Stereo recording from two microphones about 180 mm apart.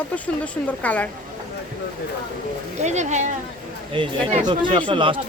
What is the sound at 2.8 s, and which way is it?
Speech, 40° right (ahead or behind).